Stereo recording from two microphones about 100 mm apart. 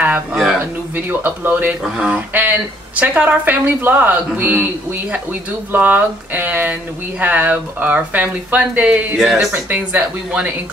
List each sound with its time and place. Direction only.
0.0 s a sound: 15° right (ahead or behind)
0.6 s speech: 15° right (ahead or behind)
5.7 s speech: 15° right (ahead or behind)
9.7 s speech: 15° right (ahead or behind)